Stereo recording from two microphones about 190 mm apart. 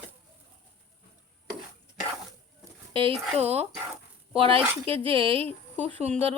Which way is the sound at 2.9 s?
30° right (ahead or behind).